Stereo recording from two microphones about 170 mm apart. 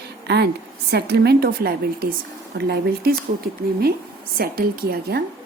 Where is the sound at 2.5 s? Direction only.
70° right (ahead or behind).